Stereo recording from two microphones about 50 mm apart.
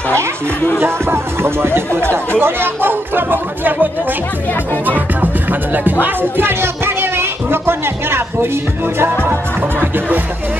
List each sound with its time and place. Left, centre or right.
0.7 s speech: right
5.2 s speech: right